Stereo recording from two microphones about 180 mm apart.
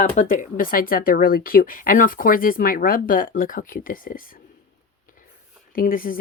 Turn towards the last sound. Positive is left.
turn(degrees=50)  # may be behind; listen again after turning